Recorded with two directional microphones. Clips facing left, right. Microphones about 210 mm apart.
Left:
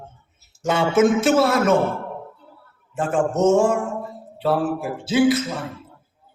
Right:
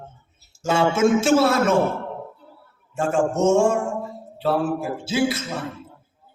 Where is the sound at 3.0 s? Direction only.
25° right (ahead or behind).